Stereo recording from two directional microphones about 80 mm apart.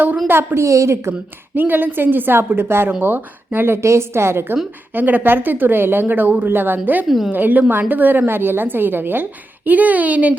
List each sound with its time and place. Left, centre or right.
0.3 s a woman's voice: right
1.5 s a woman's voice: right